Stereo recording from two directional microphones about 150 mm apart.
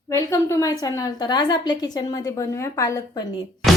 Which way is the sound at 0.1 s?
20° left (ahead or behind).